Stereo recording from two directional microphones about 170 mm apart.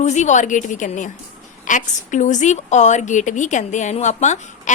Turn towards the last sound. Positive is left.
turn(degrees=45)  # may be behind; listen again after turning